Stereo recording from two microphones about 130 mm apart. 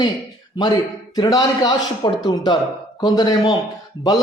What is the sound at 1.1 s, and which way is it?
A man's voice, 30° left (ahead or behind).